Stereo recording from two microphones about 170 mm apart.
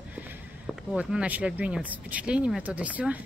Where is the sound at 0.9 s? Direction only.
5° right (ahead or behind).